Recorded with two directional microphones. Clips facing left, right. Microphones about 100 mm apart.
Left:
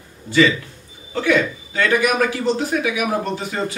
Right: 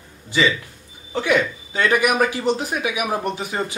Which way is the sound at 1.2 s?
20° right (ahead or behind).